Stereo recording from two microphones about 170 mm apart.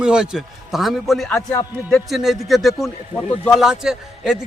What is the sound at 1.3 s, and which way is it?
Speech, 15° left (ahead or behind).